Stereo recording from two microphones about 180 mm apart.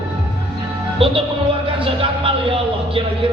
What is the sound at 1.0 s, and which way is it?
Music, 30° right (ahead or behind).